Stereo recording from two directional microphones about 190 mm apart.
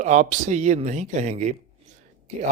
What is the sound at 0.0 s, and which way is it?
A man's voice, 40° right (ahead or behind).